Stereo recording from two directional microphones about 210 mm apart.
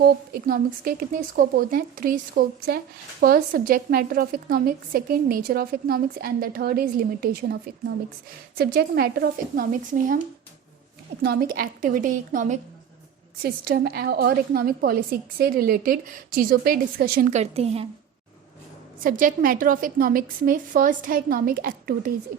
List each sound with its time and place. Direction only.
0.4 s speech: 45° right (ahead or behind)
11.2 s a woman's voice: 45° right (ahead or behind); by 17.8 s 30° right (ahead or behind)
18.9 s a woman's voice: 40° right (ahead or behind)